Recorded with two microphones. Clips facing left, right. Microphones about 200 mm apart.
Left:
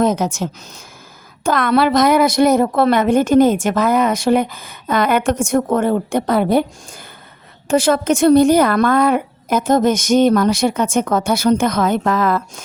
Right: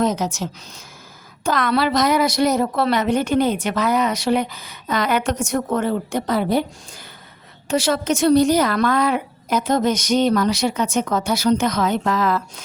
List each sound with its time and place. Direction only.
0.0 s a woman's voice: 55° left (ahead or behind)
7.7 s a woman's voice: 50° left (ahead or behind)